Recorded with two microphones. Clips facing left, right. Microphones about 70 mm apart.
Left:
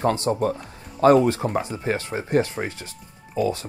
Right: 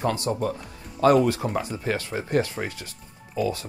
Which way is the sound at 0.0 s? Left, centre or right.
Left.